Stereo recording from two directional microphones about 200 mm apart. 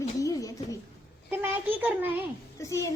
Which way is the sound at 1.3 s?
10° right (ahead or behind).